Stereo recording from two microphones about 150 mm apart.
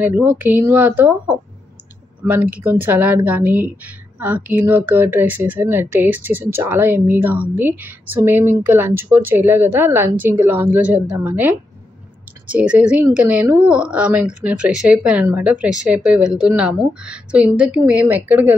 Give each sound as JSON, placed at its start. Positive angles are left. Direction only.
{"t": 0.0, "sound": "speech", "side_deg": -15}